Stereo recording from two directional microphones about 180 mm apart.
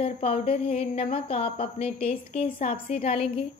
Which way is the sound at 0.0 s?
35° left (ahead or behind).